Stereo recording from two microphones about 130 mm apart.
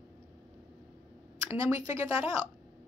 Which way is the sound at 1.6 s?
20° right (ahead or behind).